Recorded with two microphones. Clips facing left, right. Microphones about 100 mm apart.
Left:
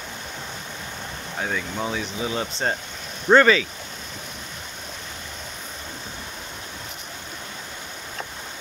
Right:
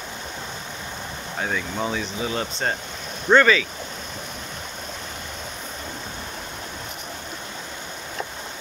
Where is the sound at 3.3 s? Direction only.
30° left (ahead or behind).